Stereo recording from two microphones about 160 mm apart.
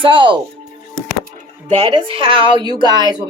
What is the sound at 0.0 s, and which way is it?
Speech, 30° right (ahead or behind).